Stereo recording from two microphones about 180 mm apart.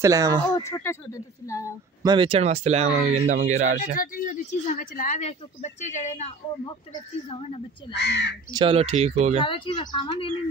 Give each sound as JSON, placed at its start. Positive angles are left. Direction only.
{"t": 0.0, "sound": "speech", "side_deg": -20}
{"t": 0.6, "sound": "speech", "side_deg": 15}
{"t": 2.0, "sound": "speech", "side_deg": -30}
{"t": 4.0, "sound": "speech", "side_deg": 50}
{"t": 7.2, "sound": "a woman's voice", "side_deg": 30}
{"t": 7.9, "sound": "speech", "side_deg": 70}
{"t": 8.5, "sound": "speech", "side_deg": -25}
{"t": 9.4, "sound": "speech", "side_deg": 30}